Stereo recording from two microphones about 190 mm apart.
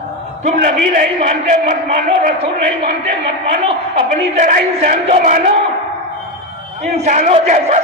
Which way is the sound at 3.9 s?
40° right (ahead or behind).